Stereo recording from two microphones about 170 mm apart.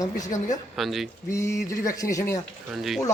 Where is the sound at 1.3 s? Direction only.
15° left (ahead or behind).